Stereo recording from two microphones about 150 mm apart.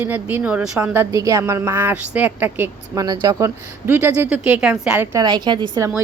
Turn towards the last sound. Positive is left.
turn(degrees=-30)  # may be behind; listen again after turning